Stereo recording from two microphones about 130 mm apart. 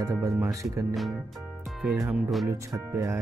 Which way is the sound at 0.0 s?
25° right (ahead or behind).